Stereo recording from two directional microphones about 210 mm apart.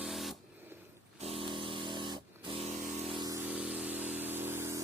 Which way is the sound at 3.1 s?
20° right (ahead or behind).